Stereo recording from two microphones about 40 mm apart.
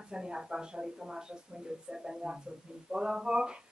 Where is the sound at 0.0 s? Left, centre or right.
Centre.